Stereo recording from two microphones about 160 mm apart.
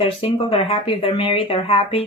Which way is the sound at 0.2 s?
35° left (ahead or behind).